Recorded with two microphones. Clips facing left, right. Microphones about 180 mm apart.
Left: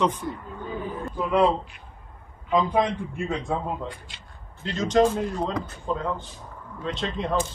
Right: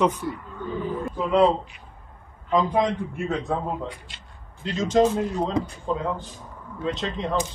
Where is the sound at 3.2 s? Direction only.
10° left (ahead or behind).